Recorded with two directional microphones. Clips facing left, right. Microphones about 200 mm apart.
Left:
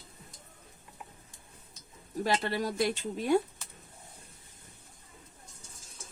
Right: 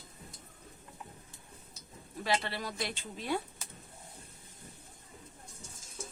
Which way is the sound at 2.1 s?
45° left (ahead or behind).